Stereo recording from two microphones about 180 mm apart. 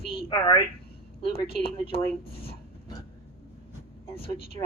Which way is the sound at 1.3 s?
60° left (ahead or behind).